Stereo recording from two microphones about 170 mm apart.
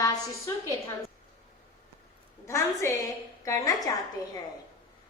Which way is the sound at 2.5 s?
15° left (ahead or behind).